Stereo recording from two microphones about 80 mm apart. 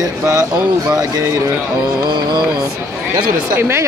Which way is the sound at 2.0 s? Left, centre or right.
Right.